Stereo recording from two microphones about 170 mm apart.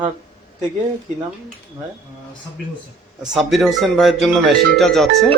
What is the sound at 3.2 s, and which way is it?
Speech, 5° right (ahead or behind).